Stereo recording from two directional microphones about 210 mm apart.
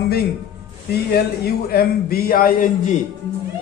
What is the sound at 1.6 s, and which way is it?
A man's voice, 45° left (ahead or behind).